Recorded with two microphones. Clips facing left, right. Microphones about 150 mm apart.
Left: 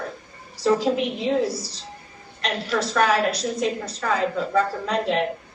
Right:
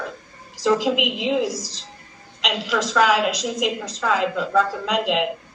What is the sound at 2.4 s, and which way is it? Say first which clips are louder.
A woman's voice: right 1 dB; 90° right.